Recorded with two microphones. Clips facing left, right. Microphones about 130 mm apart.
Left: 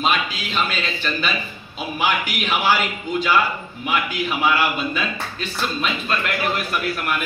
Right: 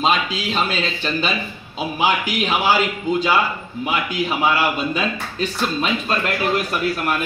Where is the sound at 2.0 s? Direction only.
35° right (ahead or behind).